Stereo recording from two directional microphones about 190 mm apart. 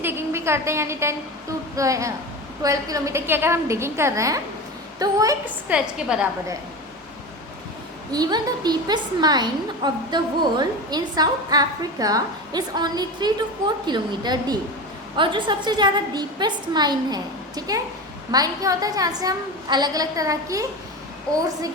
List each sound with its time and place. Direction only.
0.0 s a sound: 10° right (ahead or behind)
1.7 s a woman's voice: 15° right (ahead or behind)
5.7 s a woman's voice: 5° right (ahead or behind)
8.1 s a woman's voice: 20° right (ahead or behind)